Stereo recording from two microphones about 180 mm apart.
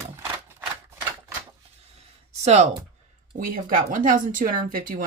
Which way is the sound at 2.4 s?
40° right (ahead or behind).